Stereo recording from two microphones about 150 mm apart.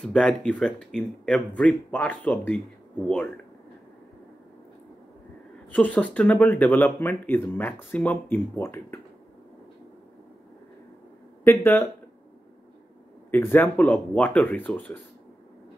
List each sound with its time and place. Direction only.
0.0 s speech: 5° left (ahead or behind)
5.7 s speech: 10° left (ahead or behind)
11.4 s speech: 15° left (ahead or behind)
13.3 s speech: 15° left (ahead or behind)